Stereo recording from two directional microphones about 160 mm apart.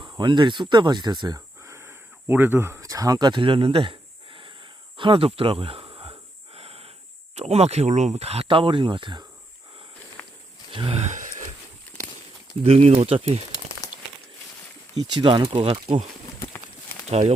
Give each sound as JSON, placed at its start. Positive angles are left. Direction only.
{"t": 0.0, "sound": "speech", "side_deg": -30}
{"t": 4.9, "sound": "a sound", "side_deg": -35}
{"t": 7.3, "sound": "speech", "side_deg": -45}
{"t": 10.2, "sound": "walk", "side_deg": 10}
{"t": 10.7, "sound": "a sound", "side_deg": -35}
{"t": 12.6, "sound": "speech", "side_deg": -40}
{"t": 15.0, "sound": "speech", "side_deg": -30}
{"t": 17.1, "sound": "speech", "side_deg": -40}